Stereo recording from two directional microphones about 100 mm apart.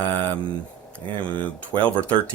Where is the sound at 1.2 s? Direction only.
15° left (ahead or behind).